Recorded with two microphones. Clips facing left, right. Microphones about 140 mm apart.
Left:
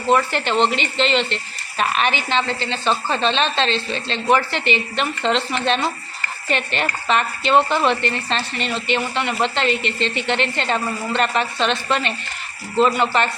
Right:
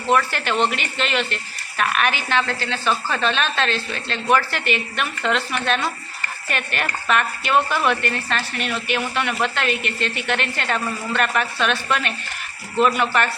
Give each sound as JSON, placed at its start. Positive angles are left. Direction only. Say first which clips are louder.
{"t": 0.1, "sound": "speech", "louder": "left 2 dB", "side_deg": 20}
{"t": 9.6, "sound": "speech", "louder": "left 3 dB", "side_deg": -55}
{"t": 10.2, "sound": "speech", "louder": "left 2 dB", "side_deg": 20}